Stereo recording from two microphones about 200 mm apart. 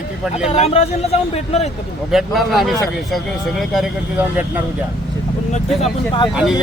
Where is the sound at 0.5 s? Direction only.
35° left (ahead or behind).